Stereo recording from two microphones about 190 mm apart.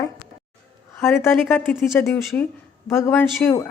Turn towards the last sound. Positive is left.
turn(degrees=10)  # may be behind; listen again after turning